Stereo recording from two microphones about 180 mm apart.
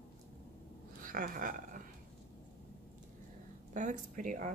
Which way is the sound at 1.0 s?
50° right (ahead or behind).